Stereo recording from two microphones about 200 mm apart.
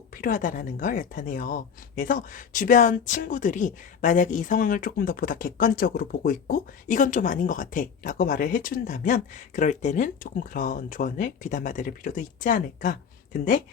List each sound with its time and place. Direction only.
0.1 s speech: 45° left (ahead or behind)